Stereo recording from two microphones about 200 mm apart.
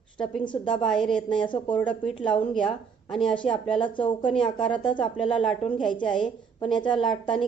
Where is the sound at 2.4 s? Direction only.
25° left (ahead or behind).